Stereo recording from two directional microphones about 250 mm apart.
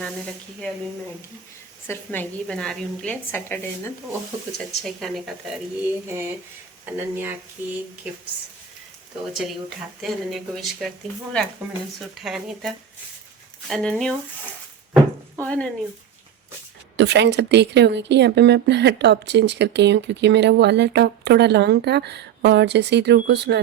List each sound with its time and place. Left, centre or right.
0.6 s speech: centre
1.9 s a woman's voice: centre
6.1 s speech: centre
10.0 s a woman's voice: centre
11.9 s a woman's voice: centre
15.4 s a woman's voice: centre
17.0 s speech: right